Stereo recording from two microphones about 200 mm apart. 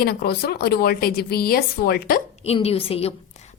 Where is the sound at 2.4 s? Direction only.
30° left (ahead or behind).